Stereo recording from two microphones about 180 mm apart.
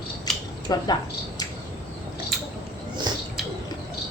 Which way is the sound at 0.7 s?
20° left (ahead or behind).